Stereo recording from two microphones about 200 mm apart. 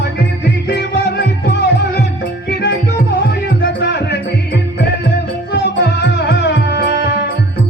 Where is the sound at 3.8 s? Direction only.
60° left (ahead or behind).